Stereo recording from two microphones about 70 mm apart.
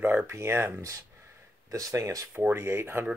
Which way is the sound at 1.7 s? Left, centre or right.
Right.